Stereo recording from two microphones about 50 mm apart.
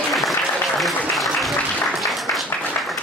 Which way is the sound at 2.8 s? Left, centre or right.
Left.